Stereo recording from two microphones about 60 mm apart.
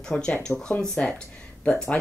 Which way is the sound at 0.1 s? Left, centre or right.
Centre.